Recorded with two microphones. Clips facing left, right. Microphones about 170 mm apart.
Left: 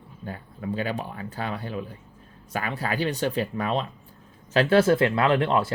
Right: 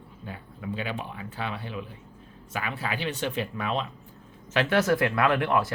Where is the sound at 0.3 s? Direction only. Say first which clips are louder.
Left 4 dB; 40° left (ahead or behind).